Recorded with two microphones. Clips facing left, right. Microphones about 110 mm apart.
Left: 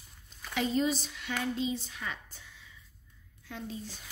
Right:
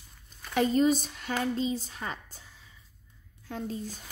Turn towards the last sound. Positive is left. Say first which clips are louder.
# right 5 dB
turn(degrees=-45)  # may be behind; listen again after turning